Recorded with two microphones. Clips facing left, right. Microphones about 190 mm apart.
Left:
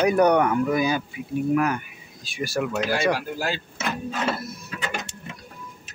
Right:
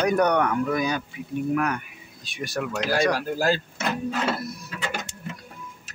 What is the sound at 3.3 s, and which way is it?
Speech, 40° right (ahead or behind).